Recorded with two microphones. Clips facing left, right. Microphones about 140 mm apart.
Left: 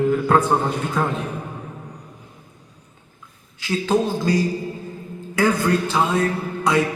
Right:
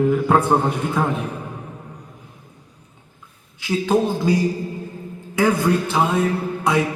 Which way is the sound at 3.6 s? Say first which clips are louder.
Right 1 dB; 10° right (ahead or behind).